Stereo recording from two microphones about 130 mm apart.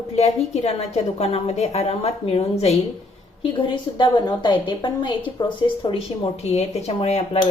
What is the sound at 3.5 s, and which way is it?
A woman's voice, 40° left (ahead or behind).